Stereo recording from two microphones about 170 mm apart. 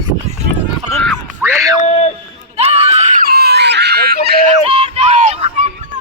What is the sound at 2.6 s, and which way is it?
Screaming, 35° right (ahead or behind).